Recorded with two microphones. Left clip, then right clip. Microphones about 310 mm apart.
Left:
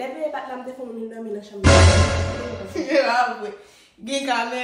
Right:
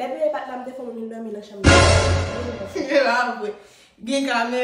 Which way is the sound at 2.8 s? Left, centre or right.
Centre.